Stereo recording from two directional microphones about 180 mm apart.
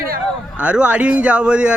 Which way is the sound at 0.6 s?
5° right (ahead or behind).